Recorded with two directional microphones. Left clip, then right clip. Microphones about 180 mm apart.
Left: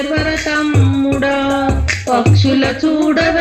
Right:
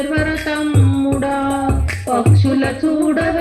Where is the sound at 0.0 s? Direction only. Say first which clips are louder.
Left 2 dB; 30° left (ahead or behind).